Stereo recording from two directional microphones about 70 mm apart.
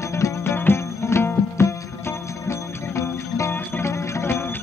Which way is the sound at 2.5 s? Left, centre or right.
Left.